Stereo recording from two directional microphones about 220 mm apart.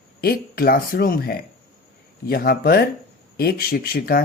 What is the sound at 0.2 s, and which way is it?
Speech, 40° left (ahead or behind).